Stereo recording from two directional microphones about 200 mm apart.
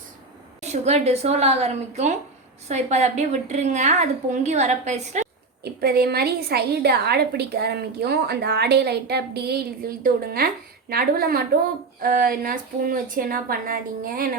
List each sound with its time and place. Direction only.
0.6 s a woman's voice: 35° right (ahead or behind)
5.6 s a woman's voice: 50° right (ahead or behind)